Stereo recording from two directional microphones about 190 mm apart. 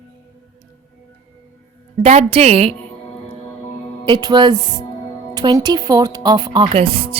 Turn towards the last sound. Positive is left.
turn(degrees=-30)  # may be behind; listen again after turning